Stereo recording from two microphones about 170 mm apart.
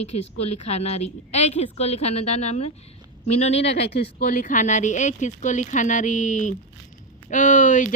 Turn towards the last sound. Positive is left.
turn(degrees=50)  # may be behind; listen again after turning